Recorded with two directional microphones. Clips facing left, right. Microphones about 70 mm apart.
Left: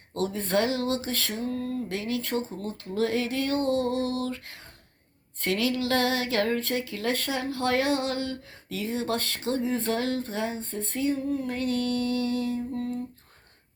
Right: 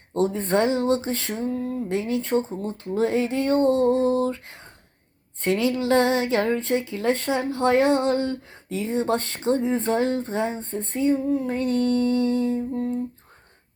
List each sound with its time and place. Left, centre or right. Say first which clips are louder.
0.1 s speech: right 5 dB; right